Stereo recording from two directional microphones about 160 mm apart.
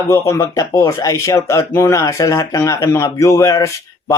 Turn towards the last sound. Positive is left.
turn(degrees=20)  # may be behind; listen again after turning